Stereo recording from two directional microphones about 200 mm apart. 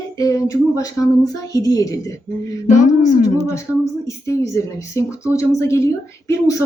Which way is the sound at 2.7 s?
40° left (ahead or behind).